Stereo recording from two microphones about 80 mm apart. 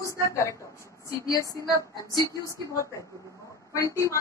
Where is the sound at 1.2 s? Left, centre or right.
Left.